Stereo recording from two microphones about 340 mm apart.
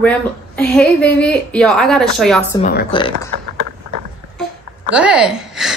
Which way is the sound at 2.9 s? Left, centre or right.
Centre.